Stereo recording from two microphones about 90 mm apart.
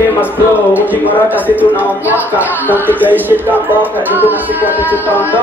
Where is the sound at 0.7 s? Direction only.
20° right (ahead or behind).